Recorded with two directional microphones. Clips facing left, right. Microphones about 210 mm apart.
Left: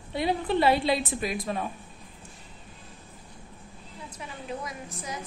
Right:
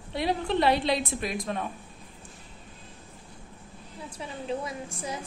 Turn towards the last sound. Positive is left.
turn(degrees=-30)  # may be behind; listen again after turning